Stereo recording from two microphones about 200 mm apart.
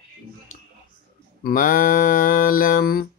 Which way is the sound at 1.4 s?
45° left (ahead or behind).